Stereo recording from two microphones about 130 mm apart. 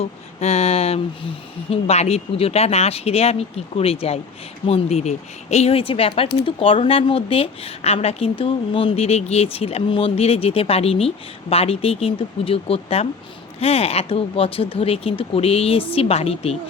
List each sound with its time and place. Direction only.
0.0 s speech: 55° left (ahead or behind)